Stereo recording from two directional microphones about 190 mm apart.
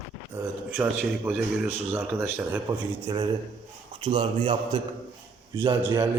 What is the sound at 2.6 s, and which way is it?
A man's voice, 25° right (ahead or behind).